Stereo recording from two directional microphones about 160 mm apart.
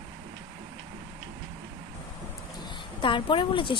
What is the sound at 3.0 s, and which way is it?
Speech, 30° left (ahead or behind).